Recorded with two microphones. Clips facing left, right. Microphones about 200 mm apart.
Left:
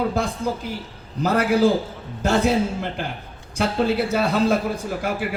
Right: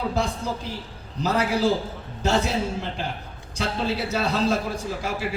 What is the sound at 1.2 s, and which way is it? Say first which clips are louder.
A man's voice: left 4 dB; 55° left (ahead or behind).